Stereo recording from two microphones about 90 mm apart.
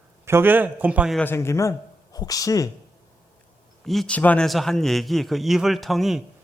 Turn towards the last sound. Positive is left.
turn(degrees=0)  # may be behind; listen again after turning